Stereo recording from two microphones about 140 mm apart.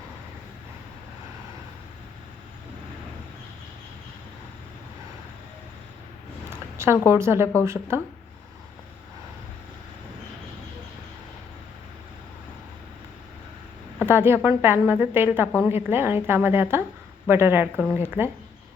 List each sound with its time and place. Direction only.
6.5 s a sound: 20° right (ahead or behind)
7.1 s a woman's voice: 20° right (ahead or behind)
14.1 s a woman's voice: 15° right (ahead or behind)